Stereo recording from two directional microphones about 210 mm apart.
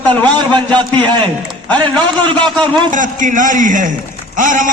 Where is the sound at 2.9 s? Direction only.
40° right (ahead or behind).